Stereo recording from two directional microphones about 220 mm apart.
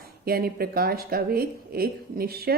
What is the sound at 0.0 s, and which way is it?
A woman's voice, 45° right (ahead or behind).